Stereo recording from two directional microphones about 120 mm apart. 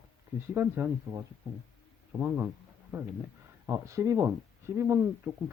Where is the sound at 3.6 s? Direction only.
25° right (ahead or behind).